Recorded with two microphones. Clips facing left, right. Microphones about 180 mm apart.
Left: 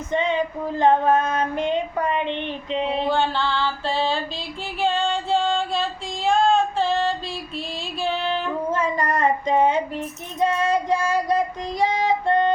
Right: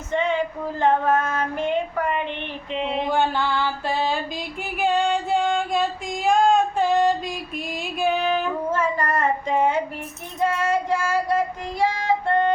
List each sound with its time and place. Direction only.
0.1 s female singing: 20° left (ahead or behind)
2.8 s music: 15° right (ahead or behind)
4.8 s female singing: 15° right (ahead or behind)
8.7 s a sound: 15° left (ahead or behind)
10.4 s child singing: 15° left (ahead or behind)